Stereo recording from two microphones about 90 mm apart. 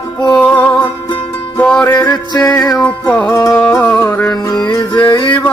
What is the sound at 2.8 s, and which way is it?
Music, 15° left (ahead or behind).